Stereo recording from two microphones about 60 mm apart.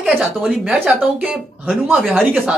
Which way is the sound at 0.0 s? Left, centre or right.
Centre.